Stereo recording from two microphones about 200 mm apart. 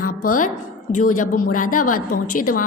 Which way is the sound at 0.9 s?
40° left (ahead or behind).